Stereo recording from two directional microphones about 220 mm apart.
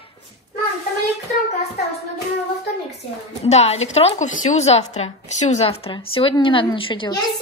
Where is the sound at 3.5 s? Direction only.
30° left (ahead or behind).